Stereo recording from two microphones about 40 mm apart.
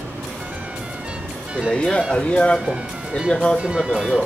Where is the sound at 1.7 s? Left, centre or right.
Centre.